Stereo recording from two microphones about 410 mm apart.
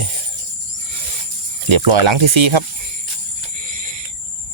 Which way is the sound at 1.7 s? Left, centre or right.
Right.